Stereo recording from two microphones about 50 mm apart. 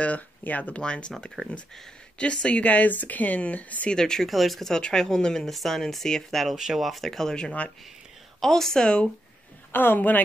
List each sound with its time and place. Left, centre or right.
0.0 s speech: left
0.8 s speech: centre
2.1 s speech: left
3.9 s speech: centre
4.3 s speech: centre
6.5 s speech: centre
6.9 s speech: centre; by 7.7 s left
8.4 s speech: centre
9.7 s speech: left